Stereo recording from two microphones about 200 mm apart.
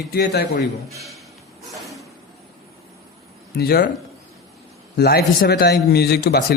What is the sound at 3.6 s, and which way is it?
Speech, 50° left (ahead or behind).